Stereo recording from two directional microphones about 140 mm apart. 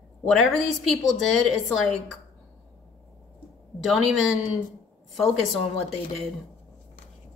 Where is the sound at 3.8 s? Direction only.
Centre (ahead or behind).